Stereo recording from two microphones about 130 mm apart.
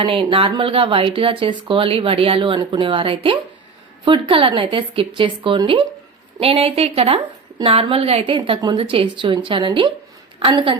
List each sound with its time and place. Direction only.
0.0 s speech: 45° right (ahead or behind)
8.4 s speech: 35° right (ahead or behind)